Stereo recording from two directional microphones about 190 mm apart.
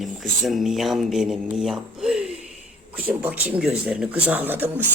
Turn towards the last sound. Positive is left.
turn(degrees=-10)  # may be behind; listen again after turning